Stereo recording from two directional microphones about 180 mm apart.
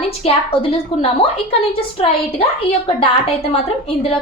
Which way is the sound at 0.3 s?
30° left (ahead or behind).